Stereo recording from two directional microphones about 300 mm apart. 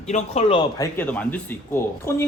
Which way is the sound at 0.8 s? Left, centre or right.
Centre.